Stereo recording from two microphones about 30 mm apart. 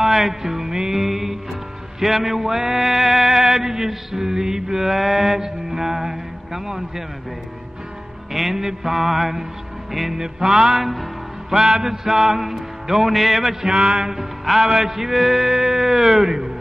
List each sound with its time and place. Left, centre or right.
0.0 s music: centre
4.9 s mantra: centre
8.3 s music: centre
10.1 s music: centre
10.8 s music: centre
11.5 s music: centre
13.7 s mantra: right
14.6 s music: centre